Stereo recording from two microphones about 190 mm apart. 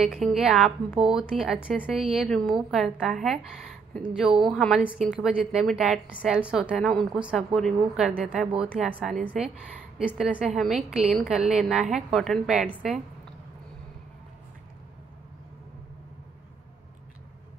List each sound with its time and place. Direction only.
0.0 s a woman's voice: centre (ahead or behind)